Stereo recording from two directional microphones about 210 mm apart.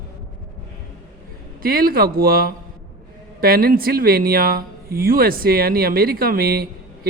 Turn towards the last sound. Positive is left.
turn(degrees=-45)  # may be behind; listen again after turning